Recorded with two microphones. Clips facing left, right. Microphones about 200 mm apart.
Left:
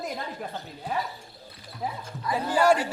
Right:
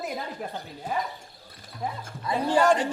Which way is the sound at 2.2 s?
25° right (ahead or behind).